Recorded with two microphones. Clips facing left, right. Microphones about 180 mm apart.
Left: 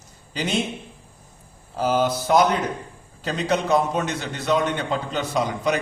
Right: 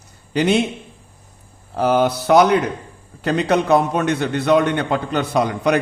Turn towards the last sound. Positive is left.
turn(degrees=-65)  # may be behind; listen again after turning